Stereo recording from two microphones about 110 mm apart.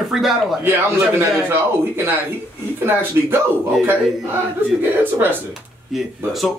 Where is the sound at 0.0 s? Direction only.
Centre (ahead or behind).